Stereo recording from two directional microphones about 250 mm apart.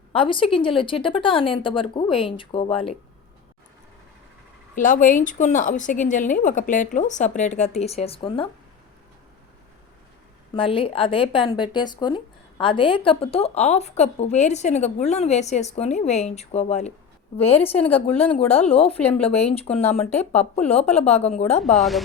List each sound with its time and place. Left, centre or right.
0.1 s speech: left
4.7 s speech: left
10.5 s speech: left
18.1 s speech: centre
18.3 s speech: left
21.6 s speech: centre